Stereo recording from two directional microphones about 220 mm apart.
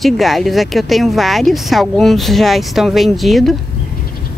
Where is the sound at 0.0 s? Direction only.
Centre (ahead or behind).